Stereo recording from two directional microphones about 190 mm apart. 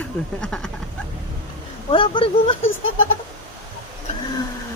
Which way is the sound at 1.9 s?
25° left (ahead or behind).